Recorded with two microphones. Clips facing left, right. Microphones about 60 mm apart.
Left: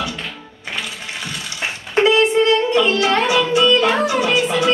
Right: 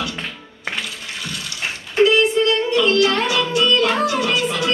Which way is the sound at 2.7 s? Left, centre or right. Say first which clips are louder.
Even; left.